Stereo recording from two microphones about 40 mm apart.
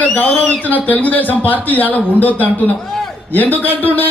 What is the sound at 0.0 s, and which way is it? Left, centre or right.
Speech, left.